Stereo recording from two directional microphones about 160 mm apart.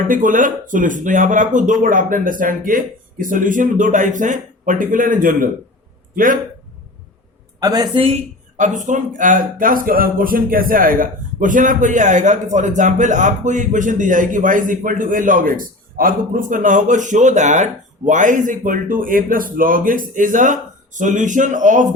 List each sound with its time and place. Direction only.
0.1 s speech: 55° right (ahead or behind)
7.6 s speech: 25° right (ahead or behind)
8.0 s speech: 45° right (ahead or behind)